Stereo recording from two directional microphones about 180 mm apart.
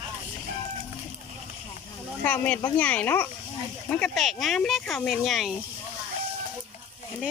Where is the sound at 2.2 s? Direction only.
10° left (ahead or behind).